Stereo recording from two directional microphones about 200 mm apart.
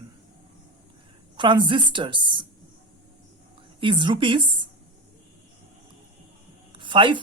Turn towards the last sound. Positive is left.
turn(degrees=-25)  # may be behind; listen again after turning